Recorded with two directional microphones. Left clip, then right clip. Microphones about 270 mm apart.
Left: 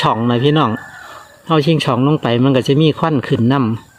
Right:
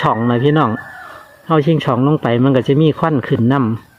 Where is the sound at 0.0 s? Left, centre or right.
Centre.